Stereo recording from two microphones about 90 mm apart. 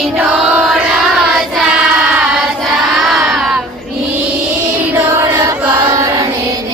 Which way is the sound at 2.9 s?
Centre (ahead or behind).